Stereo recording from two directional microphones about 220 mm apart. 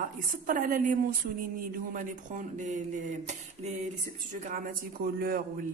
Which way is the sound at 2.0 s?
35° right (ahead or behind).